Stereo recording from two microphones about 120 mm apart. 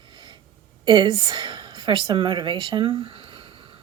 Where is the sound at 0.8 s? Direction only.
40° right (ahead or behind).